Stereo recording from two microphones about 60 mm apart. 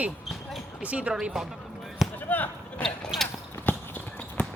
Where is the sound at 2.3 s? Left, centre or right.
Left.